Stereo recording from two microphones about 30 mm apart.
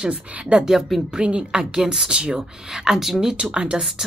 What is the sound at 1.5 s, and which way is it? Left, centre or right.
A woman's voice, right.